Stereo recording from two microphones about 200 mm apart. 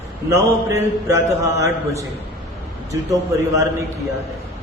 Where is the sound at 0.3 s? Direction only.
15° right (ahead or behind).